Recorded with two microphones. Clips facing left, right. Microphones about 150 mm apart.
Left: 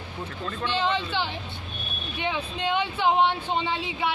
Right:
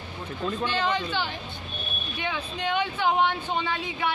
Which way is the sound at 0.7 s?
25° left (ahead or behind).